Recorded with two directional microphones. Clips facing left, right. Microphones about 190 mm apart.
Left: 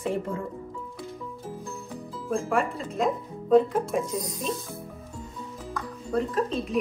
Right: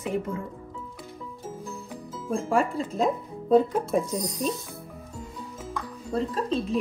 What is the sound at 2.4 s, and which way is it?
Speech, 30° right (ahead or behind).